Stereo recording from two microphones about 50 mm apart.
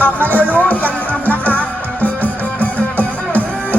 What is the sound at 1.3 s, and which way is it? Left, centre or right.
Music, left.